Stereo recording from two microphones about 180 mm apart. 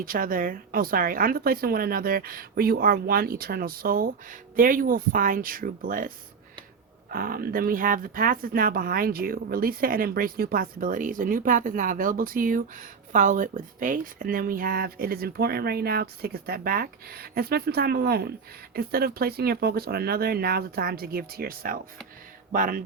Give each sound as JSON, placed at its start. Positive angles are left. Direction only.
{"t": 0.0, "sound": "speech", "side_deg": -50}